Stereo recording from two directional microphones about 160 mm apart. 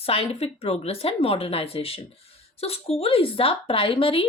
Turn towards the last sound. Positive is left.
turn(degrees=35)  # may be behind; listen again after turning